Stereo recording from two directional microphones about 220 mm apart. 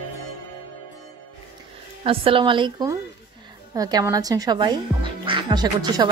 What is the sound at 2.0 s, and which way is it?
Speech, 25° right (ahead or behind).